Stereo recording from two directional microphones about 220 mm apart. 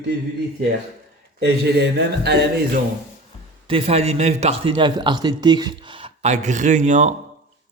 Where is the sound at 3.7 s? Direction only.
25° right (ahead or behind).